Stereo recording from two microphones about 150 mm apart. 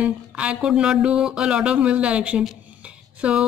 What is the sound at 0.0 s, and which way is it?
A woman's voice, 5° right (ahead or behind).